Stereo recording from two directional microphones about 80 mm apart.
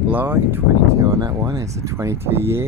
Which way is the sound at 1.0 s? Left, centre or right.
Right.